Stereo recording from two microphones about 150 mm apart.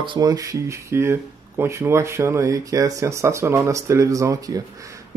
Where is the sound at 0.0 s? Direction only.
30° right (ahead or behind).